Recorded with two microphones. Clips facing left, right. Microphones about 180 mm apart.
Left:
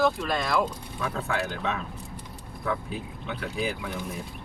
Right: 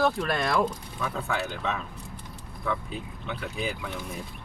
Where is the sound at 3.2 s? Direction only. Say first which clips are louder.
Left 2 dB; centre (ahead or behind).